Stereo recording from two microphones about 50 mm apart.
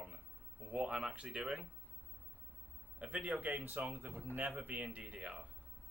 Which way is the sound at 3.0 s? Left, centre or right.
Right.